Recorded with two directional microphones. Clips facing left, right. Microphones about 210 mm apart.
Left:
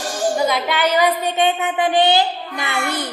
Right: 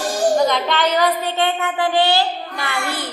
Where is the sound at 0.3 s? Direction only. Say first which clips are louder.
Right 2 dB; 10° left (ahead or behind).